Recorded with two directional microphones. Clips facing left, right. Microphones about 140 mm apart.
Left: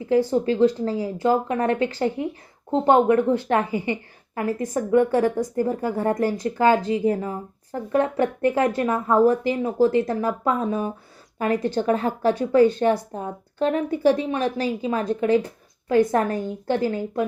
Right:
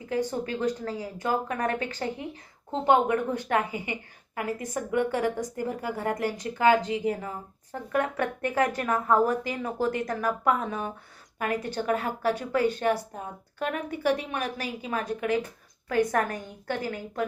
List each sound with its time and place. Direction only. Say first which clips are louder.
0.4 s speech: left 9 dB; 30° left (ahead or behind)
13.7 s speech: left 7 dB; 30° left (ahead or behind)